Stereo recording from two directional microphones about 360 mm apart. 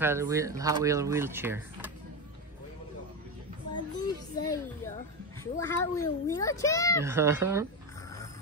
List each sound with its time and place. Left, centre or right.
0.0 s speech: centre
3.7 s children playing: centre
5.4 s speech: centre
7.0 s speech: centre